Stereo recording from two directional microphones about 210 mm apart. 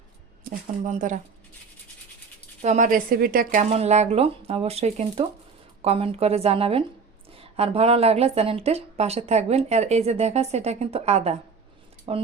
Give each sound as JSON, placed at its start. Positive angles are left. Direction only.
{"t": 0.9, "sound": "a woman's voice", "side_deg": -35}
{"t": 2.6, "sound": "a woman's voice", "side_deg": -35}
{"t": 3.6, "sound": "speech", "side_deg": -30}